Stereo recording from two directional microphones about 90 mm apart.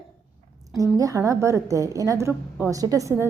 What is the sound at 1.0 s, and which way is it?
A woman's voice, 40° right (ahead or behind).